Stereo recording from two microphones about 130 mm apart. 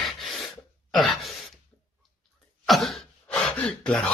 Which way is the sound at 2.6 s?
Centre (ahead or behind).